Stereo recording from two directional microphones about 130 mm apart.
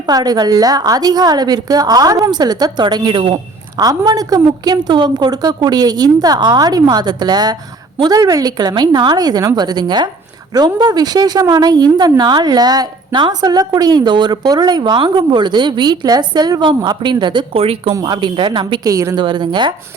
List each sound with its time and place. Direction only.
0.1 s a woman's voice: 30° right (ahead or behind)
18.9 s a woman's voice: 25° right (ahead or behind)
19.1 s a woman's voice: 35° right (ahead or behind)